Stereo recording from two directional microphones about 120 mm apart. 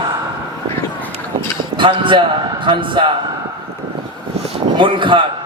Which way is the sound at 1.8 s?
45° right (ahead or behind).